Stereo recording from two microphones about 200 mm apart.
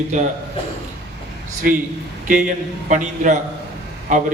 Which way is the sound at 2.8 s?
40° right (ahead or behind).